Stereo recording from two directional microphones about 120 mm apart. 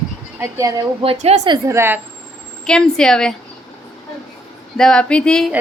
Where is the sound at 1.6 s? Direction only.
20° right (ahead or behind).